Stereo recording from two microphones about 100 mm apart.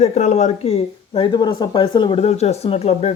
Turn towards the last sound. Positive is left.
turn(degrees=90)